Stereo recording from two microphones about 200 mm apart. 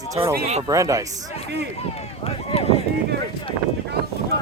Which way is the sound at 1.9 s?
30° left (ahead or behind).